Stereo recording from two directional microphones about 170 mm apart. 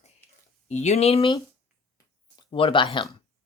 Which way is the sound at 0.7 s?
40° left (ahead or behind).